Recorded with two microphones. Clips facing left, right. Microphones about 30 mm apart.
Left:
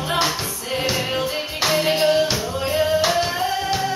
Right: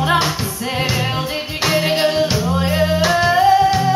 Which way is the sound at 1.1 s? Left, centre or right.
Right.